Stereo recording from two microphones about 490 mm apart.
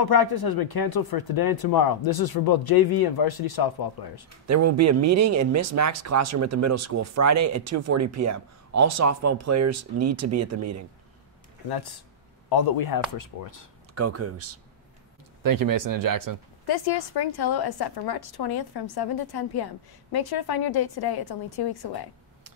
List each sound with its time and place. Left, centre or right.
0.0 s a woman's voice: left
4.5 s speech: right
11.7 s a woman's voice: left
13.9 s speech: right
15.4 s speech: right
16.6 s a woman's voice: left